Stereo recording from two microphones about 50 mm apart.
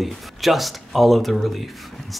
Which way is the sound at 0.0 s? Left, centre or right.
Centre.